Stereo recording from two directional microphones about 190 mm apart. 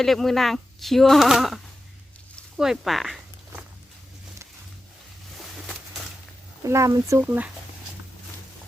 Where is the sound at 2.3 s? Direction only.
Centre (ahead or behind).